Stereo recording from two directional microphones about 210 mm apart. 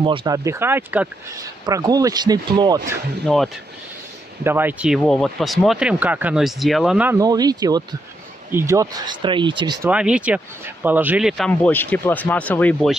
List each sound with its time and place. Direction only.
0.0 s speech: 25° right (ahead or behind)
3.3 s speech: centre (ahead or behind); by 9.8 s 20° right (ahead or behind)
9.8 s speech: 5° right (ahead or behind)